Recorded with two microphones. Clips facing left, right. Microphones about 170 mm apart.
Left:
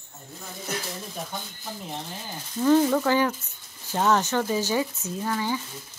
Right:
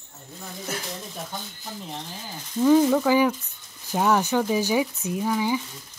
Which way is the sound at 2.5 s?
10° right (ahead or behind).